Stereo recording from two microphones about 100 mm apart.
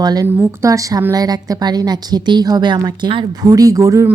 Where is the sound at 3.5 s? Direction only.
35° right (ahead or behind).